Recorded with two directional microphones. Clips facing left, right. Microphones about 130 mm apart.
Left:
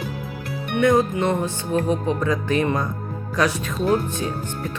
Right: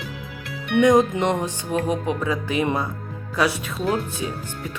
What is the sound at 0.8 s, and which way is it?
Speech, 15° right (ahead or behind).